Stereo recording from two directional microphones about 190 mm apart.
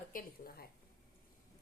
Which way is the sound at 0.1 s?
50° left (ahead or behind).